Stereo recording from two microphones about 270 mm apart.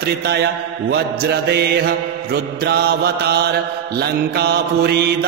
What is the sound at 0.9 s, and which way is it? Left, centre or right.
A man's voice, right.